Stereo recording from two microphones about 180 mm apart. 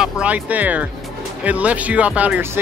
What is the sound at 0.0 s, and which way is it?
Speech, 5° right (ahead or behind).